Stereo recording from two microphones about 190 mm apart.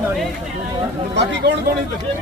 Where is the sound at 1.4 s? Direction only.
60° right (ahead or behind).